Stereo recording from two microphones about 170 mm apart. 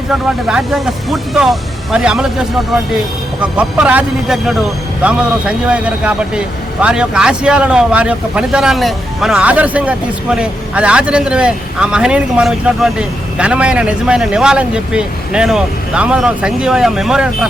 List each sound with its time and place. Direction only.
0.1 s speech: 5° right (ahead or behind)